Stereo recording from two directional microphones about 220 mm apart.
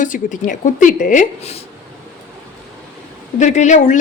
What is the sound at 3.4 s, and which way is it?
Speech, 30° left (ahead or behind).